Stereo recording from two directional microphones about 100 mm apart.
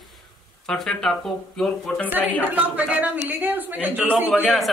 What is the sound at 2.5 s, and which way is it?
Speech, 15° right (ahead or behind).